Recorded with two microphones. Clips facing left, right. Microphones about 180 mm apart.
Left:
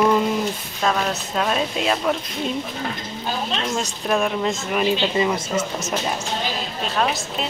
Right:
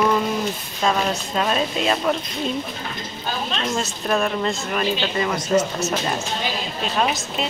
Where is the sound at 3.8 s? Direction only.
10° left (ahead or behind).